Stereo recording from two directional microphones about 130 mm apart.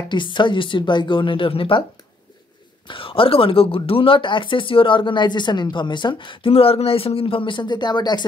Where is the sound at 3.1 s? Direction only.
45° left (ahead or behind).